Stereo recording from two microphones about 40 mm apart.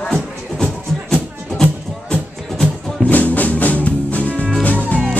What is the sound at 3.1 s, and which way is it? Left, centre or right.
Music, left.